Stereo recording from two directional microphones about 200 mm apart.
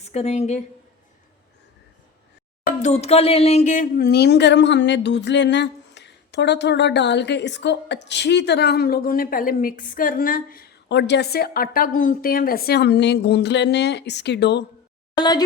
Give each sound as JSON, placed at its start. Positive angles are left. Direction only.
{"t": 0.0, "sound": "a woman's voice", "side_deg": 35}
{"t": 2.6, "sound": "speech", "side_deg": 35}
{"t": 15.2, "sound": "speech", "side_deg": 20}